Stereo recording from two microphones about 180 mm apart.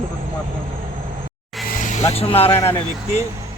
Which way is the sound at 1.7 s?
45° left (ahead or behind).